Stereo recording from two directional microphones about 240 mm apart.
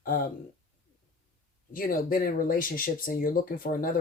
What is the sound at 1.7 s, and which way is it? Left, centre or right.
Speech, left.